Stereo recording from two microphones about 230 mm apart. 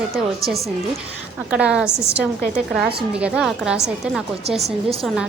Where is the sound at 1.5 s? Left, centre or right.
Centre.